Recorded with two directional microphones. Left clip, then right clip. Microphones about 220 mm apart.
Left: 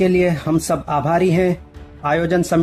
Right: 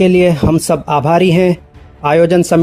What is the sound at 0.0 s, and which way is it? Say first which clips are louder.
Speech: right 6 dB; 35° right (ahead or behind).